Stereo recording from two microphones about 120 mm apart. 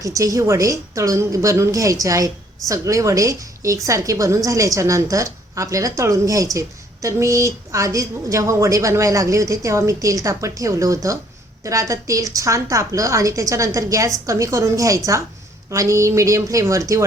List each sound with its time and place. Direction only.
0.0 s a woman's voice: 25° right (ahead or behind)